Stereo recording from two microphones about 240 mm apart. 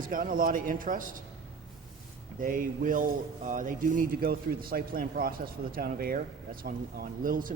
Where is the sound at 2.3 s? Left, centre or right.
Right.